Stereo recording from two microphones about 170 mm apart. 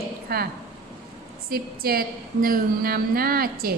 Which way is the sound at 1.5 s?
60° right (ahead or behind).